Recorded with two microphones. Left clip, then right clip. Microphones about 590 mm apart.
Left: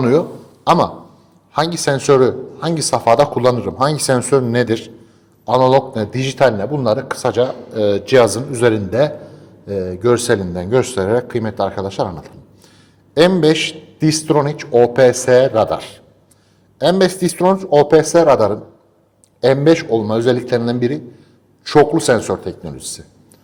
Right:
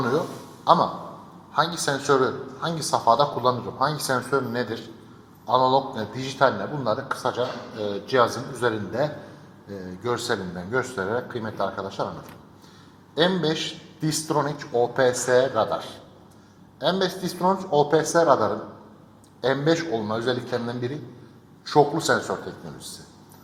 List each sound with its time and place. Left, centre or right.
0.6 s a man's voice: left
13.1 s a man's voice: left
16.8 s a man's voice: left
19.4 s a man's voice: left